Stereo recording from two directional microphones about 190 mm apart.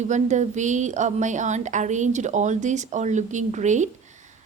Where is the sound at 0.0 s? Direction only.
40° right (ahead or behind).